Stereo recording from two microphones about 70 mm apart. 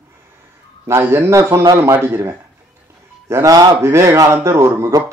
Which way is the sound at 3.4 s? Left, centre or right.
Right.